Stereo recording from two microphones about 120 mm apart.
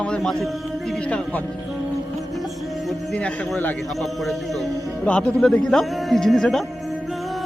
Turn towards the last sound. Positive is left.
turn(degrees=0)  # may be behind; listen again after turning